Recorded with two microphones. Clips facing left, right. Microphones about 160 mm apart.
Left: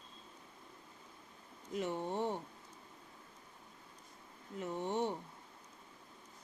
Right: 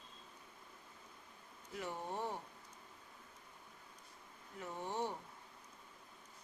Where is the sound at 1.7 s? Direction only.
25° left (ahead or behind).